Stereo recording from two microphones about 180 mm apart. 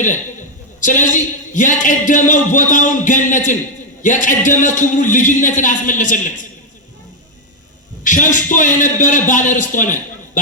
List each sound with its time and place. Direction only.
0.8 s a man's voice: 45° left (ahead or behind)
8.0 s a man's voice: 45° left (ahead or behind)